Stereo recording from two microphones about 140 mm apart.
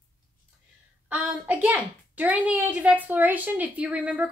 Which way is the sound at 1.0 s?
10° right (ahead or behind).